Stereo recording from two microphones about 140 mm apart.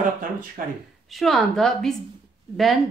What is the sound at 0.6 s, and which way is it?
Speech, 75° right (ahead or behind).